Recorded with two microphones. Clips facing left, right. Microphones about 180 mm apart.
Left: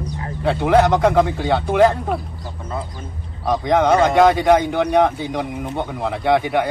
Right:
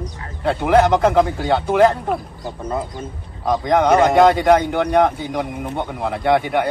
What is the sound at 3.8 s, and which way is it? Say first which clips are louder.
Speech: right 2 dB; 15° right (ahead or behind).